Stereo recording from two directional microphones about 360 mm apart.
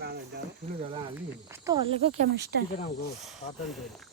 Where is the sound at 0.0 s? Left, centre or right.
Right.